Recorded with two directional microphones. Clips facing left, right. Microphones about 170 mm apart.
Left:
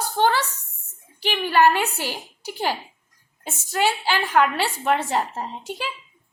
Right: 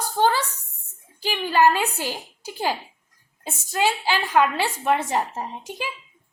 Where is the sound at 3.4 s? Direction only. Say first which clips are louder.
Even; 15° right (ahead or behind).